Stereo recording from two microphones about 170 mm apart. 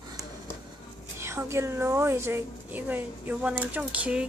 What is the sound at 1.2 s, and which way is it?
A woman's voice, 15° right (ahead or behind).